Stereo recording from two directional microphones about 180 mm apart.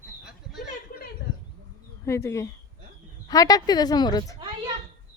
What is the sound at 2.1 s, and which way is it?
Speech, 15° left (ahead or behind).